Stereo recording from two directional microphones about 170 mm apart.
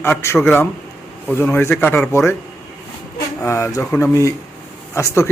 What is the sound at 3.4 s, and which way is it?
A man's voice, 15° left (ahead or behind).